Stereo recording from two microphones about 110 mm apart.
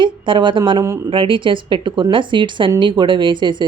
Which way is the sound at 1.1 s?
50° right (ahead or behind).